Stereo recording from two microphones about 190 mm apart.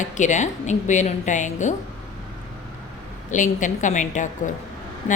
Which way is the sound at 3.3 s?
40° left (ahead or behind).